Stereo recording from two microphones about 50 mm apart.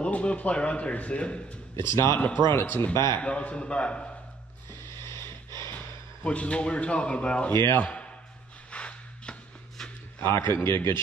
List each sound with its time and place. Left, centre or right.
0.0 s a man's voice: left
1.9 s speech: left
2.5 s a man's voice: left
2.9 s speech: left
3.2 s a man's voice: left
5.0 s a sound: left
6.2 s a man's voice: left
7.8 s a sound: left
8.7 s shuffle: left
10.2 s a man's voice: left